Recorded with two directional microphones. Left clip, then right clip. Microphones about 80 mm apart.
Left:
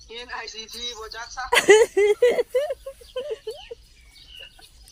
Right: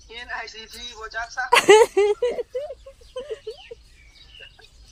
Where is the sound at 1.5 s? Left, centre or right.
Right.